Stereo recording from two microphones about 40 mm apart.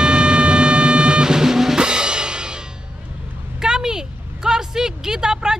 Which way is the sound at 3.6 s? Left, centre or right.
Centre.